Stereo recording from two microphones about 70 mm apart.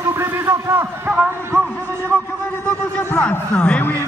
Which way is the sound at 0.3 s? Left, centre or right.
Right.